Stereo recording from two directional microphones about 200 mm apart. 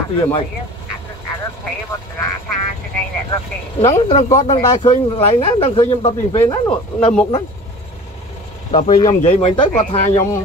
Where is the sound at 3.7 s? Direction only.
30° left (ahead or behind).